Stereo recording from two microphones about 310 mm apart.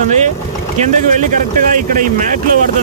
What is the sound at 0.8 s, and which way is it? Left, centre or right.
Speech, right.